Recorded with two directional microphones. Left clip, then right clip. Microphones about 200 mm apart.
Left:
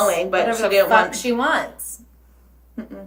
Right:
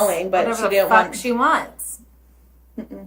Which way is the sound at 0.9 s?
10° left (ahead or behind).